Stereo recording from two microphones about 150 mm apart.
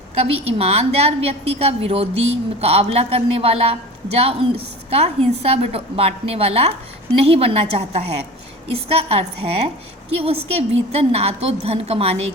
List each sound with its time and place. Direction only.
0.2 s a woman's voice: 40° right (ahead or behind)